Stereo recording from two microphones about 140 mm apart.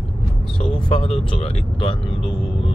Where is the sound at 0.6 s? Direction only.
45° left (ahead or behind).